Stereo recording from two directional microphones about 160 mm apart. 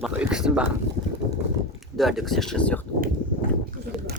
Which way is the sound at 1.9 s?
Centre (ahead or behind).